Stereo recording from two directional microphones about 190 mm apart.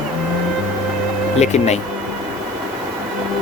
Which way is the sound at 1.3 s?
35° left (ahead or behind).